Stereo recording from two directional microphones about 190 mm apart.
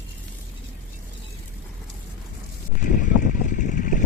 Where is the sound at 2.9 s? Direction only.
45° left (ahead or behind).